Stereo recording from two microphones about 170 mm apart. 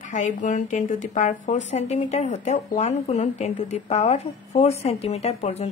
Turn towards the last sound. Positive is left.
turn(degrees=40)  # may be behind; listen again after turning